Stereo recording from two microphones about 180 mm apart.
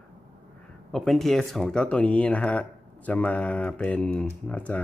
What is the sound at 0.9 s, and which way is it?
Speech, centre (ahead or behind).